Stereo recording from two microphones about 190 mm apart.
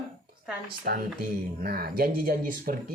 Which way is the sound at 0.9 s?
55° right (ahead or behind).